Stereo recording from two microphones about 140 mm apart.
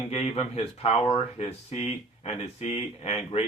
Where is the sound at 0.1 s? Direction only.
50° left (ahead or behind).